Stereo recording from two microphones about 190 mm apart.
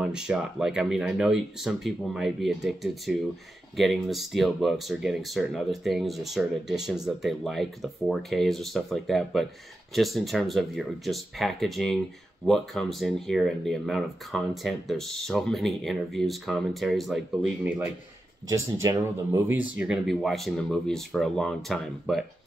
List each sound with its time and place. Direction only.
0.0 s speech: 5° right (ahead or behind)
18.5 s speech: 15° right (ahead or behind)
19.8 s speech: centre (ahead or behind)